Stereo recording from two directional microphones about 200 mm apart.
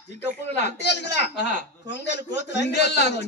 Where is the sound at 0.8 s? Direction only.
60° left (ahead or behind).